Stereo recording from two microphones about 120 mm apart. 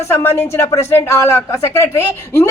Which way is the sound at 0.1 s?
20° left (ahead or behind).